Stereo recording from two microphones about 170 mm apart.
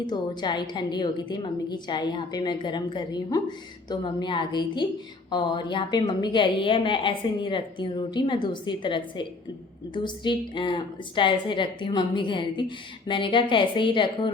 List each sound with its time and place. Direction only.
0.0 s a woman's voice: 25° left (ahead or behind)